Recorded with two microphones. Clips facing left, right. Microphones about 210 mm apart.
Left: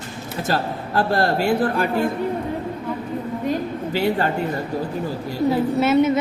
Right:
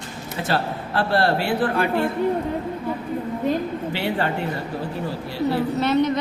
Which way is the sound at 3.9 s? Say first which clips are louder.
Left 5 dB; 40° left (ahead or behind).